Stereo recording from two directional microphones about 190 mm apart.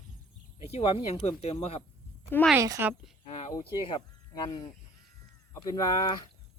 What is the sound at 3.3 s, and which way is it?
Speech, 35° left (ahead or behind).